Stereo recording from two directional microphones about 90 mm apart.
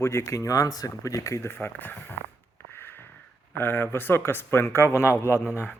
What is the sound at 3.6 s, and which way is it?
Speech, 25° left (ahead or behind).